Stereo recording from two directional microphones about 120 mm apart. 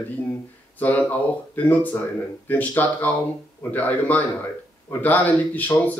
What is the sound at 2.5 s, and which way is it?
Speech, 15° left (ahead or behind).